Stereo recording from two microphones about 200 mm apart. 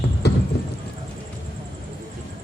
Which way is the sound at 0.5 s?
55° left (ahead or behind).